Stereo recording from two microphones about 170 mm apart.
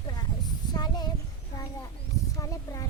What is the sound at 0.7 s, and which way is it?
Speech, 25° left (ahead or behind).